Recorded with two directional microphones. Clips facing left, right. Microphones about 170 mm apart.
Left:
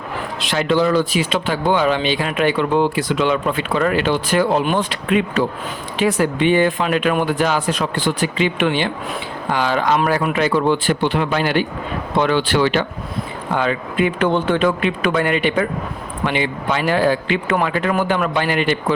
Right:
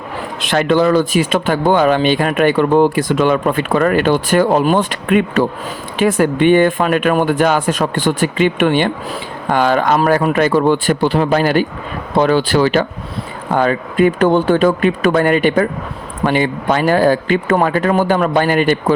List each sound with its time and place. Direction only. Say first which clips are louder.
0.4 s speech: right 4 dB; 55° right (ahead or behind)